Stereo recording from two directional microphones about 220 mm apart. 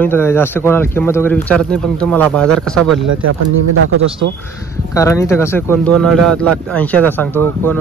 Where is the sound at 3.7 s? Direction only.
70° right (ahead or behind).